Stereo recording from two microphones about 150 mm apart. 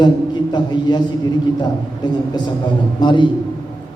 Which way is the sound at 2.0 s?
30° left (ahead or behind).